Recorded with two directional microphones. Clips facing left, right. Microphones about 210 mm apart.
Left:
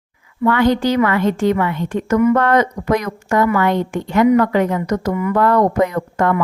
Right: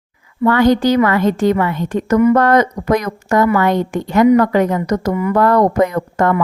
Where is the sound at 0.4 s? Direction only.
40° right (ahead or behind).